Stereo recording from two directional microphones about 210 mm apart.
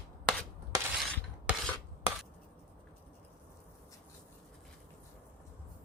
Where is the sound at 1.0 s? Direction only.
5° left (ahead or behind).